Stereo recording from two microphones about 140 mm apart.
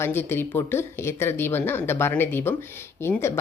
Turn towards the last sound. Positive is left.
turn(degrees=15)  # may be behind; listen again after turning